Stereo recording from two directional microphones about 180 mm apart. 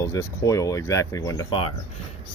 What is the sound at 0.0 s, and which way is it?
Speech, 15° left (ahead or behind).